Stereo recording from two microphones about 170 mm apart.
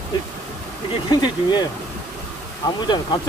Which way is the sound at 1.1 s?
25° left (ahead or behind).